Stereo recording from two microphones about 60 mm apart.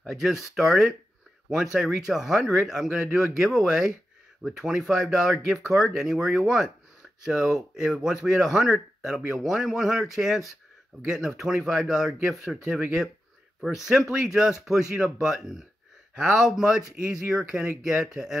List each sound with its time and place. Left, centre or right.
0.1 s a man's voice: centre
14.2 s a man's voice: centre